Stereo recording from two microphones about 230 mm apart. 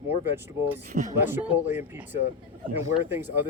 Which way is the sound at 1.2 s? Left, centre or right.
Centre.